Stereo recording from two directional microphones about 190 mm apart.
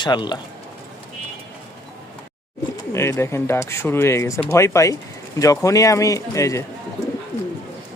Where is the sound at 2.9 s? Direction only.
15° left (ahead or behind).